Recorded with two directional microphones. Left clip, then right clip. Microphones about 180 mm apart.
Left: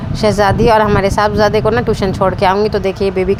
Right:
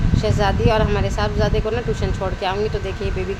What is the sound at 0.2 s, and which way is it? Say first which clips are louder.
Speech: left 9 dB; 50° left (ahead or behind).